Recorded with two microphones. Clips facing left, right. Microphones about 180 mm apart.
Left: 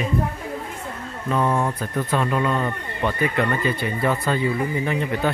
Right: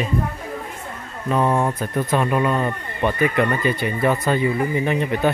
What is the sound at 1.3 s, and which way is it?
Speech, 20° right (ahead or behind).